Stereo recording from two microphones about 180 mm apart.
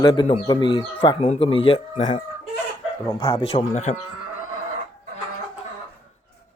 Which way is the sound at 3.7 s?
40° left (ahead or behind).